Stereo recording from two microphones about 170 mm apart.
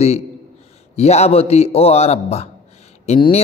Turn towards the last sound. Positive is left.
turn(degrees=40)  # may be behind; listen again after turning